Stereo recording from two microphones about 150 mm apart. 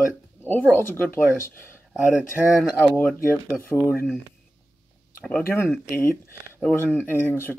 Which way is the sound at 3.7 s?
15° left (ahead or behind).